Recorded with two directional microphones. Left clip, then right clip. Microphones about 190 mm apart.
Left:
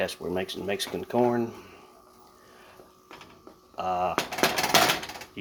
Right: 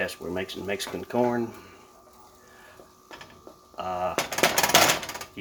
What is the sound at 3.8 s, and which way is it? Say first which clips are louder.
Speech: left 2 dB; 15° left (ahead or behind).